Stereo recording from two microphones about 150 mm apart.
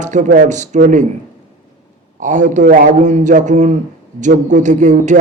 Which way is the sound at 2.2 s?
55° right (ahead or behind).